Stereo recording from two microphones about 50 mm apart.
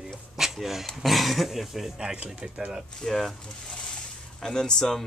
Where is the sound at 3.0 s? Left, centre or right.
Centre.